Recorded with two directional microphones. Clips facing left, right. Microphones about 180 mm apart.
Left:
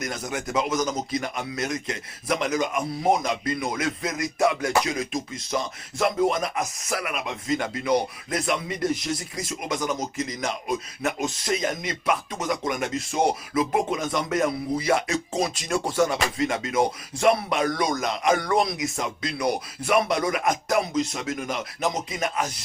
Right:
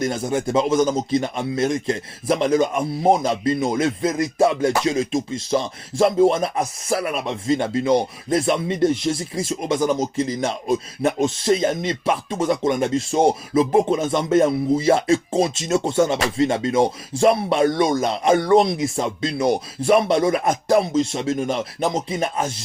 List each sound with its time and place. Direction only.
0.0 s speech: 30° right (ahead or behind)